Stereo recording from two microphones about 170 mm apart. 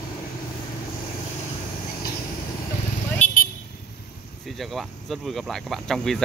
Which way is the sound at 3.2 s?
45° left (ahead or behind).